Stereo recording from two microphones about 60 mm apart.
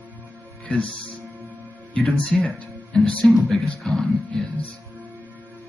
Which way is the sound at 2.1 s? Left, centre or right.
Centre.